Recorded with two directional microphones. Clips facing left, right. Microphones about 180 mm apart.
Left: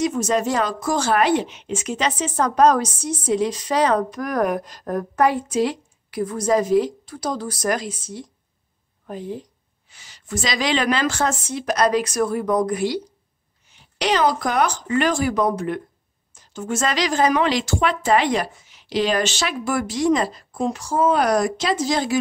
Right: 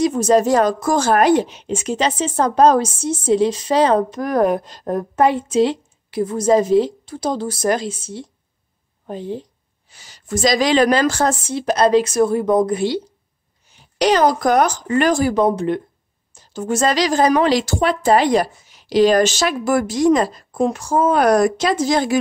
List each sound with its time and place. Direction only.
0.0 s a woman's voice: 35° right (ahead or behind)
13.7 s a woman's voice: 40° right (ahead or behind)